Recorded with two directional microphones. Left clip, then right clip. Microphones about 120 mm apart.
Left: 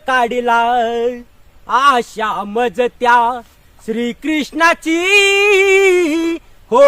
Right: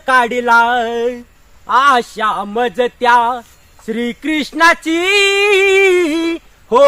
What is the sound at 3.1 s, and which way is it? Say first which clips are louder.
Male singing: even; 40° left (ahead or behind).